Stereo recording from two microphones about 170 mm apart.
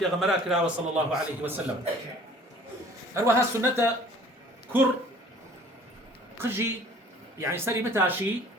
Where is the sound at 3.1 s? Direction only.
15° right (ahead or behind).